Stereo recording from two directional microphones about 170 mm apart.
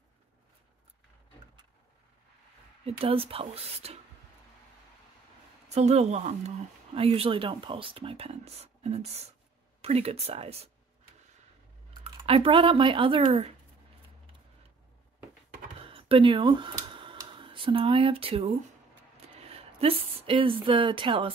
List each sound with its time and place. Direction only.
3.0 s speech: 35° right (ahead or behind)
5.7 s speech: 40° right (ahead or behind)
12.3 s speech: 30° right (ahead or behind)
15.8 s a sound: 35° right (ahead or behind)
19.4 s speech: 35° right (ahead or behind)